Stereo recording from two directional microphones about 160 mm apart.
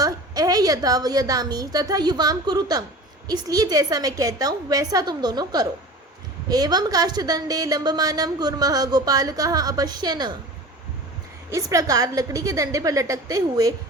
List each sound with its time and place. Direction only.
0.0 s a woman's voice: 20° right (ahead or behind)
11.5 s a woman's voice: 20° right (ahead or behind)